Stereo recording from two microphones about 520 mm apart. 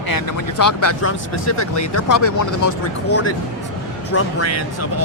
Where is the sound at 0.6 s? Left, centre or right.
Left.